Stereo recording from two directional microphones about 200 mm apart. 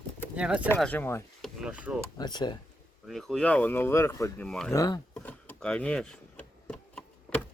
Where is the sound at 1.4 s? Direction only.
5° right (ahead or behind).